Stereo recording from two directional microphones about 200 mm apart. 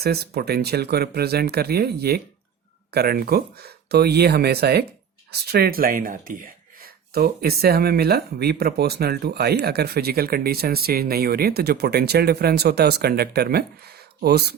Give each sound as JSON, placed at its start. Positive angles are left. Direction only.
{"t": 0.0, "sound": "speech", "side_deg": -50}